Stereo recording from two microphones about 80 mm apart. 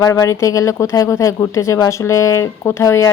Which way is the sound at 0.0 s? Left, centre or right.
Left.